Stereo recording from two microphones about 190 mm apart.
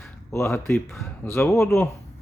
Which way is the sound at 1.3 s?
15° left (ahead or behind).